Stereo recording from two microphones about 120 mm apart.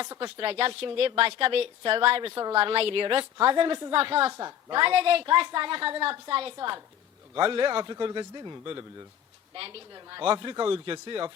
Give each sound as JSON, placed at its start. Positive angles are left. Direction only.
{"t": 0.2, "sound": "a woman's voice", "side_deg": -45}
{"t": 4.3, "sound": "a woman's voice", "side_deg": -30}
{"t": 4.7, "sound": "a woman's voice", "side_deg": -50}
{"t": 6.6, "sound": "a man's voice", "side_deg": -35}